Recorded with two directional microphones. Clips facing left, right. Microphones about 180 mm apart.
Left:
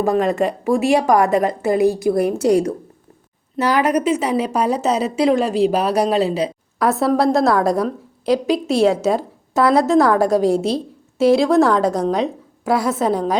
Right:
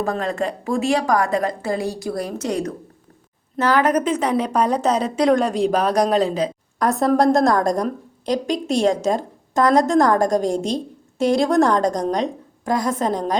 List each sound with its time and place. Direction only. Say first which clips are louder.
0.0 s a woman's voice: left 5 dB; 15° left (ahead or behind); by 2.7 s 30° left (ahead or behind)
3.6 s speech: left 1 dB; 10° left (ahead or behind)